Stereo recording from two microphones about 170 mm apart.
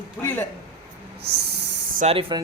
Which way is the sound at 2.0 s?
35° right (ahead or behind).